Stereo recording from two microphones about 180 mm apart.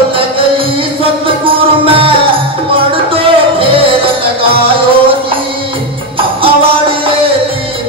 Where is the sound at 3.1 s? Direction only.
30° right (ahead or behind).